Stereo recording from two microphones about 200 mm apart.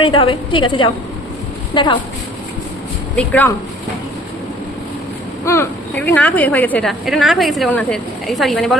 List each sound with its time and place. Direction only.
0.0 s a woman's voice: 25° left (ahead or behind)
3.2 s speech: 10° left (ahead or behind)
5.5 s a woman's voice: 10° left (ahead or behind)